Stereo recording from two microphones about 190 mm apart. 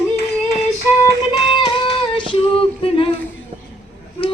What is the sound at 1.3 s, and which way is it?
Music, 25° left (ahead or behind).